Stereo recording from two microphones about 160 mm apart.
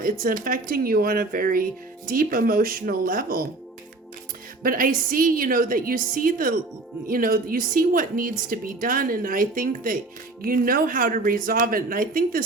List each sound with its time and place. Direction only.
0.0 s a woman's voice: 60° right (ahead or behind)
4.6 s a woman's voice: 60° right (ahead or behind)